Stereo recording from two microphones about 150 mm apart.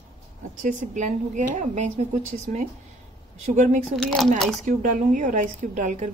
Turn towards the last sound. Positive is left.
turn(degrees=-55)  # may be behind; listen again after turning